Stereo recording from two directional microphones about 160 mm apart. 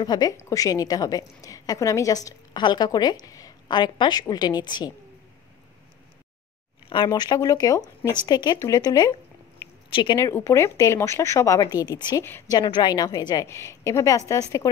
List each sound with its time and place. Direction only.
0.0 s a woman's voice: 25° left (ahead or behind)
6.9 s a woman's voice: 30° left (ahead or behind)
10.1 s a woman's voice: 20° left (ahead or behind)
12.5 s a woman's voice: 30° left (ahead or behind)